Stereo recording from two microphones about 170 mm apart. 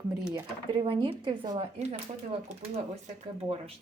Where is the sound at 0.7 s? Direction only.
25° right (ahead or behind).